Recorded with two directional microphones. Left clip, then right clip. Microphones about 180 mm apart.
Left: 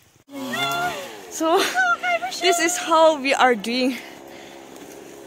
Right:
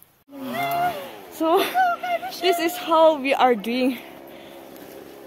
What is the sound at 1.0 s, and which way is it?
Speech, centre (ahead or behind).